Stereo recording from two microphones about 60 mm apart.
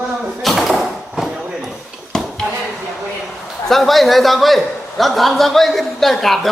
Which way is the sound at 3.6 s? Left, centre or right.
Centre.